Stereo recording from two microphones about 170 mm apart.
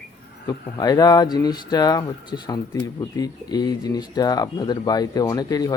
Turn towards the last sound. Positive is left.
turn(degrees=20)  # may be behind; listen again after turning